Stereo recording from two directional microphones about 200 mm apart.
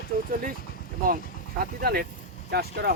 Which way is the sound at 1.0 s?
45° right (ahead or behind).